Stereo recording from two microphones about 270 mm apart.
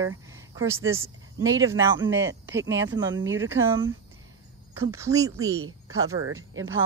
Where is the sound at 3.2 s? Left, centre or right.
Right.